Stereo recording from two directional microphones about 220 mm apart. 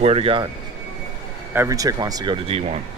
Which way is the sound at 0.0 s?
25° right (ahead or behind).